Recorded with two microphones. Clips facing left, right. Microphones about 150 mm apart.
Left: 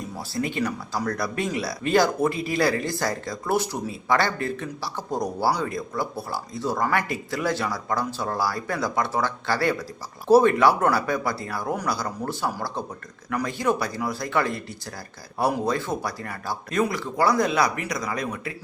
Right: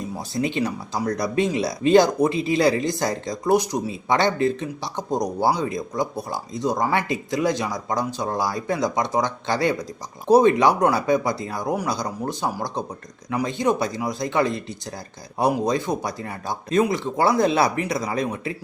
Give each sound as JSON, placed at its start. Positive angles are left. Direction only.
{"t": 0.2, "sound": "speech", "side_deg": -20}